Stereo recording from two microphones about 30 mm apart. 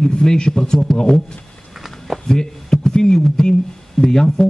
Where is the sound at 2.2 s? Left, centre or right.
Left.